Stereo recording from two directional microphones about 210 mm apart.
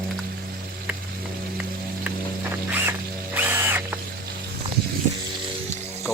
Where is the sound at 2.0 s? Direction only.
10° right (ahead or behind).